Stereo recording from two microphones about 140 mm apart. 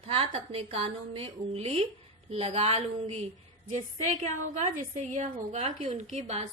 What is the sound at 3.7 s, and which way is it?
A woman's voice, 55° right (ahead or behind).